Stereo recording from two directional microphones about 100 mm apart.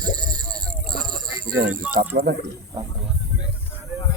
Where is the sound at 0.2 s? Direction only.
40° right (ahead or behind).